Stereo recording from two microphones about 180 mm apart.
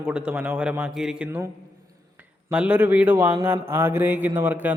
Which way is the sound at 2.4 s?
5° right (ahead or behind).